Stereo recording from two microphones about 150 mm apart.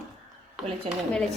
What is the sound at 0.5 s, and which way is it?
Speech, centre (ahead or behind).